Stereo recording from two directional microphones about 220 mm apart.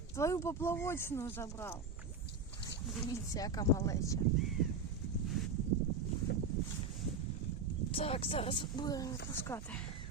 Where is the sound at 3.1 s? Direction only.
15° left (ahead or behind).